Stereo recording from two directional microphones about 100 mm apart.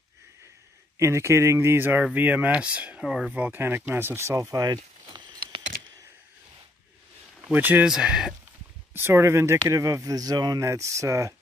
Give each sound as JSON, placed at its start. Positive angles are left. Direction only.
{"t": 0.9, "sound": "speech", "side_deg": -30}
{"t": 3.3, "sound": "speech", "side_deg": -20}
{"t": 7.4, "sound": "speech", "side_deg": -20}
{"t": 7.9, "sound": "speech", "side_deg": -5}
{"t": 8.9, "sound": "speech", "side_deg": -25}